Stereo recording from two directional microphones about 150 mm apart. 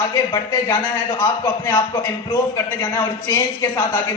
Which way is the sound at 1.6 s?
20° left (ahead or behind).